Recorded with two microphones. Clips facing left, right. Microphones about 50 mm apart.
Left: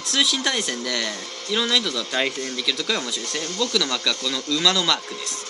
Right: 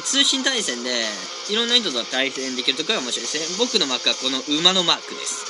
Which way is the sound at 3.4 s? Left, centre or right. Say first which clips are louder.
Right 3 dB; left.